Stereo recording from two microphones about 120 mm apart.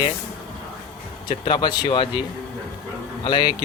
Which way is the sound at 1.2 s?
45° left (ahead or behind).